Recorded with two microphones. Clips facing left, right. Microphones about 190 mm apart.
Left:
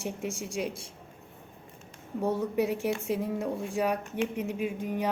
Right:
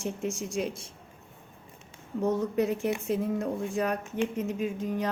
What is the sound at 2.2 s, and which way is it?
Speech, 10° left (ahead or behind).